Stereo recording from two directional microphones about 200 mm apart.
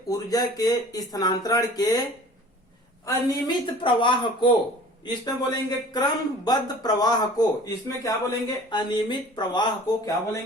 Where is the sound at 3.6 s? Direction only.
25° left (ahead or behind).